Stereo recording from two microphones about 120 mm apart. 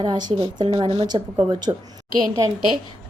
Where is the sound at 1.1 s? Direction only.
35° right (ahead or behind).